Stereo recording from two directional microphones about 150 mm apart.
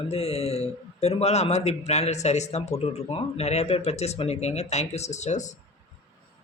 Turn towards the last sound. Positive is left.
turn(degrees=50)  # may be behind; listen again after turning